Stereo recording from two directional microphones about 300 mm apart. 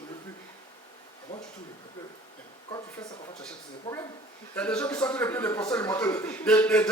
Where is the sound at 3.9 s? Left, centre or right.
Centre.